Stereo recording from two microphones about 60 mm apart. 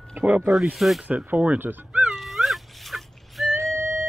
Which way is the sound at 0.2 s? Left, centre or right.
Right.